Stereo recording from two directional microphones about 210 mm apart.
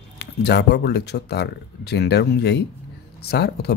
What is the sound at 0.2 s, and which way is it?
Speech, 50° left (ahead or behind).